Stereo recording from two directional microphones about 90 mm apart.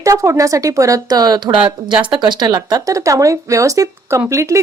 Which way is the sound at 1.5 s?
65° right (ahead or behind).